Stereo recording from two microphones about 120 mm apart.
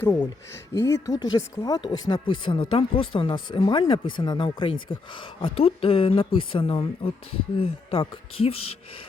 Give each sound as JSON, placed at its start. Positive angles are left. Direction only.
{"t": 0.0, "sound": "speech", "side_deg": 20}
{"t": 0.7, "sound": "speech", "side_deg": 30}